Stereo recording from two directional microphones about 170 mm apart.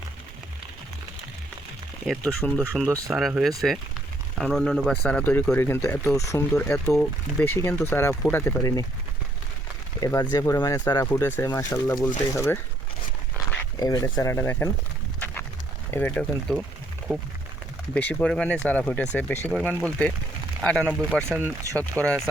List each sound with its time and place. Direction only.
2.0 s speech: 5° left (ahead or behind)
10.0 s speech: 25° left (ahead or behind)
13.7 s speech: 20° left (ahead or behind)
15.9 s speech: 10° left (ahead or behind)
17.9 s speech: 5° left (ahead or behind)
21.2 s speech: 15° right (ahead or behind)
22.0 s speech: 10° left (ahead or behind)